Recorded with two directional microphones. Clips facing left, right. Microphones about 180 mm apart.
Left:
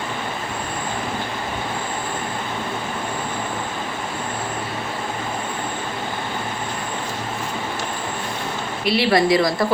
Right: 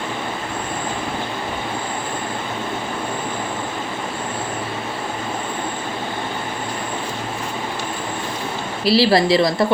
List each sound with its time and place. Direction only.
8.8 s speech: 30° right (ahead or behind)